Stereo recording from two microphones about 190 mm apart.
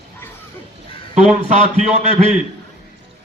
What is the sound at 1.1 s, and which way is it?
A man's voice, 40° right (ahead or behind).